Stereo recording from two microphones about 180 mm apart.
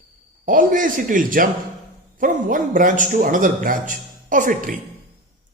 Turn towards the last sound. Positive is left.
turn(degrees=-45)  # may be behind; listen again after turning